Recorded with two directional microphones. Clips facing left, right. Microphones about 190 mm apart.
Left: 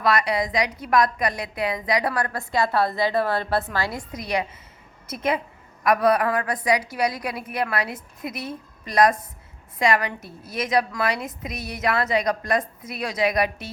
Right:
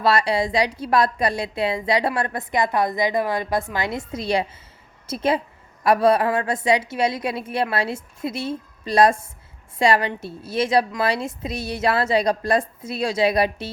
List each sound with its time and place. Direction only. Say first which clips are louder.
0.0 s a woman's voice: right 2 dB; 30° right (ahead or behind)